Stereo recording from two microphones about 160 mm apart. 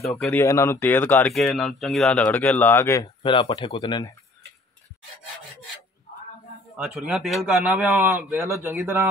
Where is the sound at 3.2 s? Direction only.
30° left (ahead or behind).